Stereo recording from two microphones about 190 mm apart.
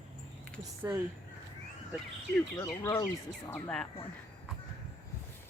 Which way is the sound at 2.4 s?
15° left (ahead or behind).